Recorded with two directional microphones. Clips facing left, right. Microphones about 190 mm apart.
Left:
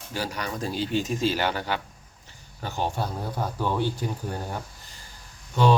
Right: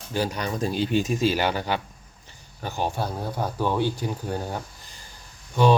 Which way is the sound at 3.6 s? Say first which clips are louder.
Right 2 dB; 15° right (ahead or behind).